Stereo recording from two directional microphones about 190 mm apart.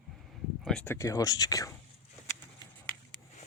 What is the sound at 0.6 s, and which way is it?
Speech, 10° left (ahead or behind).